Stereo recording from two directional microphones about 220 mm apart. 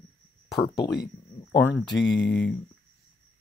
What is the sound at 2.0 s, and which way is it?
Speech, 55° left (ahead or behind).